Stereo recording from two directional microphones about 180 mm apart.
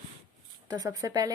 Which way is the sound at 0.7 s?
20° right (ahead or behind).